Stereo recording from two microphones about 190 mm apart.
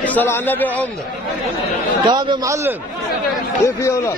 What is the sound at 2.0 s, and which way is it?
Speech, 25° right (ahead or behind).